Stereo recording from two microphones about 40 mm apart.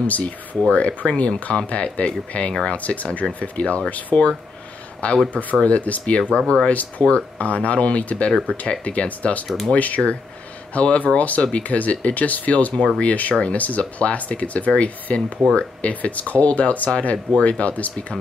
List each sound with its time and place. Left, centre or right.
0.0 s speech: left
5.3 s speech: left
6.3 s speech: left
6.7 s speech: left